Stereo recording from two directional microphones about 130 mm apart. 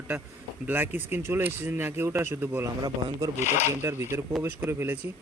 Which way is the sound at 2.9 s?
30° right (ahead or behind).